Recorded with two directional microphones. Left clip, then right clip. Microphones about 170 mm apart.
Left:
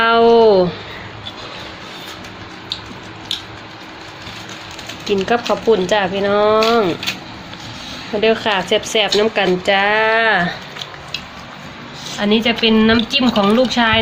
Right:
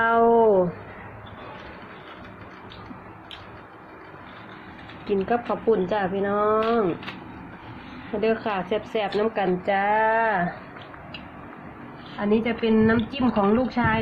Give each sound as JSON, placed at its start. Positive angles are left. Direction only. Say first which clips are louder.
{"t": 0.0, "sound": "a sound", "louder": "left 8 dB", "side_deg": 15}
{"t": 5.0, "sound": "a woman's voice", "louder": "left 8 dB", "side_deg": 15}
{"t": 8.2, "sound": "a woman's voice", "louder": "left 9 dB", "side_deg": 15}
{"t": 12.2, "sound": "a woman's voice", "louder": "left 8 dB", "side_deg": 15}